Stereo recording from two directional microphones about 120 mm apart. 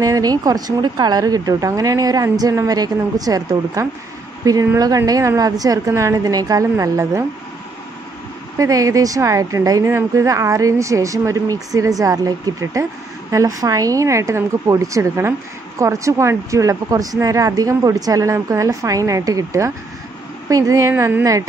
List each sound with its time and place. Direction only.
0.0 s a woman's voice: 30° right (ahead or behind)
8.5 s a woman's voice: 30° right (ahead or behind)